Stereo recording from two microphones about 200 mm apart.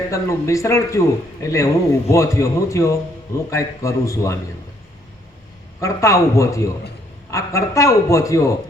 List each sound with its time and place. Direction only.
0.1 s speech: 15° left (ahead or behind)
5.8 s speech: 15° left (ahead or behind)